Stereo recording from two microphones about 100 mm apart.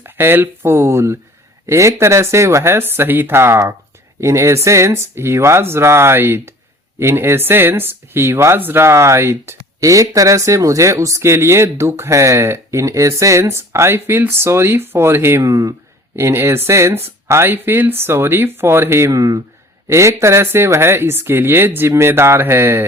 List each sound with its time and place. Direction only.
0.0 s speech: 20° right (ahead or behind)